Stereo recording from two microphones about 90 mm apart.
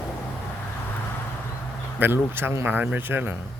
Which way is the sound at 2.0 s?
25° right (ahead or behind).